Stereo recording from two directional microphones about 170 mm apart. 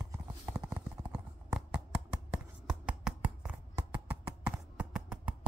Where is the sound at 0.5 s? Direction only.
15° right (ahead or behind).